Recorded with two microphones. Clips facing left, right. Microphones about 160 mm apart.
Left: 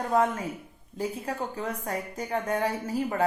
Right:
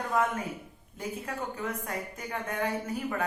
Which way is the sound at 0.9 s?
35° left (ahead or behind).